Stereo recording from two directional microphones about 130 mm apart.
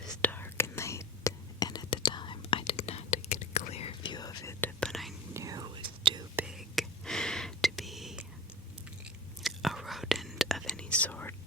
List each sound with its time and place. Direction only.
0.0 s whispering: 10° left (ahead or behind); by 4.1 s 50° left (ahead or behind)
4.1 s whispering: 30° left (ahead or behind)
4.6 s whispering: 5° left (ahead or behind)
5.3 s whispering: 25° right (ahead or behind)
6.3 s whispering: 5° right (ahead or behind)
9.4 s whispering: centre (ahead or behind)